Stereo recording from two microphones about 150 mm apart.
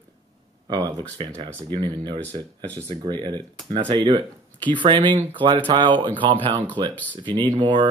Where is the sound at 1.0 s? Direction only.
30° right (ahead or behind).